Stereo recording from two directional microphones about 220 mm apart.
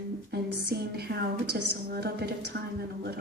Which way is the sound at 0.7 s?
45° right (ahead or behind).